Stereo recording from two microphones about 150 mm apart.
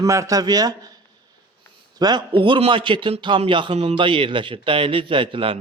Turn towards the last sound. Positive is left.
turn(degrees=-35)  # may be behind; listen again after turning